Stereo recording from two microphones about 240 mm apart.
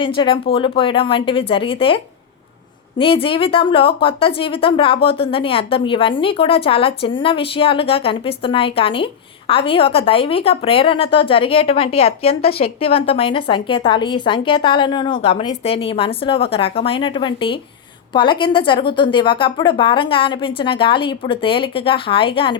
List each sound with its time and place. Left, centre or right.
0.0 s speech: left
3.0 s speech: left